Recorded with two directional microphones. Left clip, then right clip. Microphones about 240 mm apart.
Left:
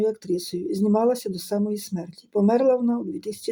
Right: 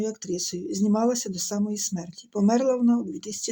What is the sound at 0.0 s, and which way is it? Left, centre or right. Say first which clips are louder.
Speech: left 5 dB; centre.